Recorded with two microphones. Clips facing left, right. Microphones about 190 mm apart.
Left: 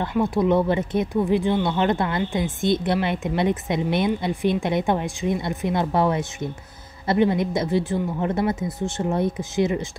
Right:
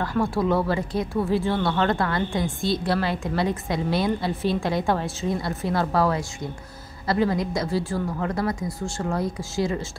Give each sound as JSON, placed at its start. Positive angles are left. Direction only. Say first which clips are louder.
{"t": 0.0, "sound": "a woman's voice", "louder": "left 2 dB", "side_deg": 20}